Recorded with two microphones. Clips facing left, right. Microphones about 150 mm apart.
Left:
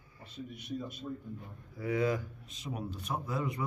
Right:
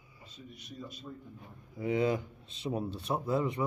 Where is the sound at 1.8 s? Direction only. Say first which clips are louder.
Right 2 dB; 25° right (ahead or behind).